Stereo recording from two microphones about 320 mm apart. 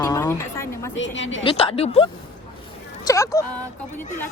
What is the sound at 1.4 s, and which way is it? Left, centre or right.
Speech, centre.